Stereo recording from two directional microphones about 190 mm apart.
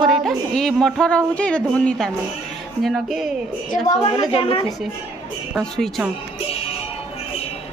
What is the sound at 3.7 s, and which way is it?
Speech, 40° left (ahead or behind).